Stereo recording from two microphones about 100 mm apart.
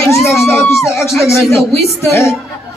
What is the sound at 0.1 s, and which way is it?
Speech, 30° left (ahead or behind).